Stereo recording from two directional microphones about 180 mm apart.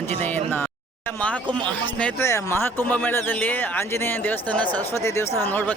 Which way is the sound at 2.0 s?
10° left (ahead or behind).